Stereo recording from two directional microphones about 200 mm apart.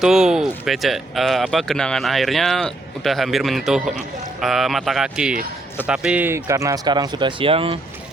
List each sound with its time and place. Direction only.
0.0 s speech: 5° right (ahead or behind); by 7.8 s 25° right (ahead or behind)